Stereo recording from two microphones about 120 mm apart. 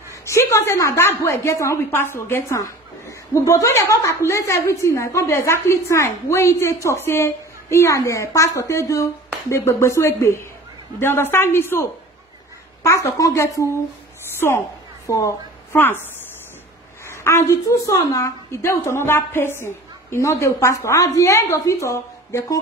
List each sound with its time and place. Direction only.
0.1 s a woman's voice: 25° left (ahead or behind)
15.0 s a woman's voice: 25° left (ahead or behind)
17.1 s a woman's voice: 20° left (ahead or behind)